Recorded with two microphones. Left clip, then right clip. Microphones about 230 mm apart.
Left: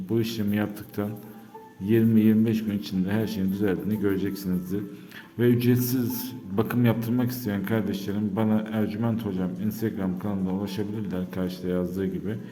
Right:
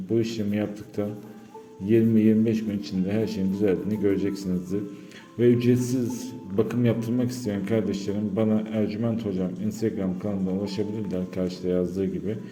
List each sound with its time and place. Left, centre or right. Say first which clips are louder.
0.1 s a man's voice: right 2 dB; centre